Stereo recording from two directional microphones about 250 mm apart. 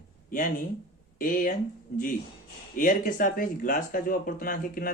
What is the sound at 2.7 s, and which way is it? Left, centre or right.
Speech, left.